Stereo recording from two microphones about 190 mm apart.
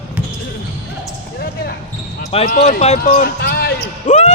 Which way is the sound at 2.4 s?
45° left (ahead or behind).